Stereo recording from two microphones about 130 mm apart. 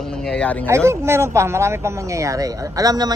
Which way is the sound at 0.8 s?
20° right (ahead or behind).